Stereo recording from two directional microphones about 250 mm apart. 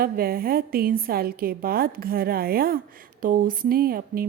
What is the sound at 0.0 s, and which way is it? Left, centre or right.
A woman's voice, right.